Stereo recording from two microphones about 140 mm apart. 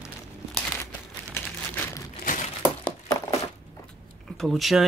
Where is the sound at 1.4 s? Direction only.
15° left (ahead or behind).